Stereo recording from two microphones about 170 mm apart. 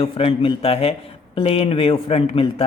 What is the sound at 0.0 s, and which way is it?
Speech, 35° left (ahead or behind).